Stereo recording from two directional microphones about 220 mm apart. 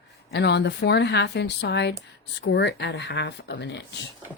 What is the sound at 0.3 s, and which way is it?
A woman's voice, 50° left (ahead or behind).